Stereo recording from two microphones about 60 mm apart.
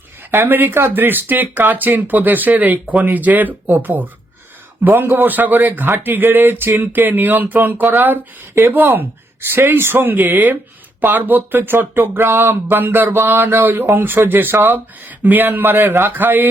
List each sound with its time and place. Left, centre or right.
0.2 s speech: right